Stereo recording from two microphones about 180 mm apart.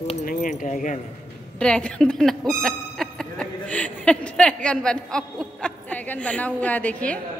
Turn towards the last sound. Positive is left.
turn(degrees=10)  # may be behind; listen again after turning